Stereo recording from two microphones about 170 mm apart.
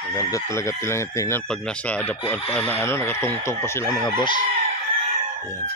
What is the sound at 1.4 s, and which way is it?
Speech, 5° left (ahead or behind).